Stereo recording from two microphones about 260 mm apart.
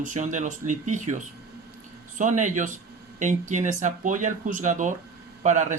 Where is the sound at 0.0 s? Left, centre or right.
Right.